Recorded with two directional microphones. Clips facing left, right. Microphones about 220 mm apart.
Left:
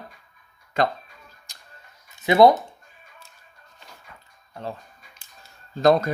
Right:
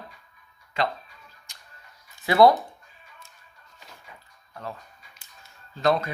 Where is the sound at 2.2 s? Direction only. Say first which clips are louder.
Left 2 dB; 20° left (ahead or behind).